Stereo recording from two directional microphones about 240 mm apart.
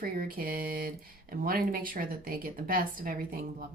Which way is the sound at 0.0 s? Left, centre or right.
Right.